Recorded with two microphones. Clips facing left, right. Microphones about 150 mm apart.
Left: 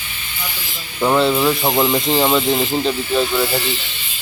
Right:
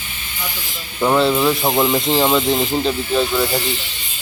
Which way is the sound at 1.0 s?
Centre (ahead or behind).